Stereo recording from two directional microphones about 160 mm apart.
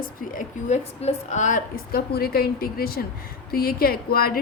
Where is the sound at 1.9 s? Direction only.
75° left (ahead or behind).